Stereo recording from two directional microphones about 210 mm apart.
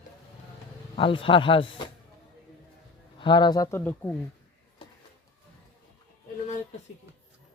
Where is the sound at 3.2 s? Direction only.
20° left (ahead or behind).